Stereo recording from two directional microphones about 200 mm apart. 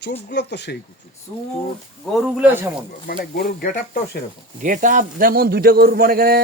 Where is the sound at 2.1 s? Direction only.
5° right (ahead or behind).